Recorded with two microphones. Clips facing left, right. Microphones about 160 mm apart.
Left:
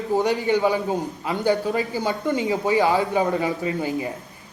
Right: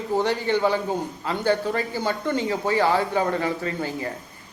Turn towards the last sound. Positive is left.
turn(degrees=15)  # may be behind; listen again after turning